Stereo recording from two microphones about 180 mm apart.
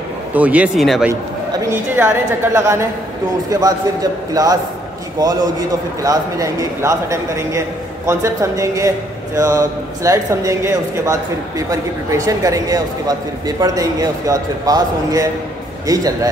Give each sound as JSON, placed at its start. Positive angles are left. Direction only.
{"t": 0.3, "sound": "a man's voice", "side_deg": -10}
{"t": 1.7, "sound": "a man's voice", "side_deg": -10}